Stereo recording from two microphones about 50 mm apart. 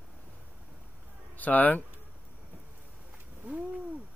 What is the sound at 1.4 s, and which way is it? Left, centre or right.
Speech, left.